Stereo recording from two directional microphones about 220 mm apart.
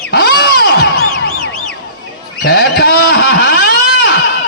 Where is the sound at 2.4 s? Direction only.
45° left (ahead or behind).